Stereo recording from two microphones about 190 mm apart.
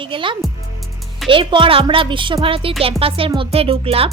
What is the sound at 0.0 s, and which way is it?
Speech, 25° right (ahead or behind).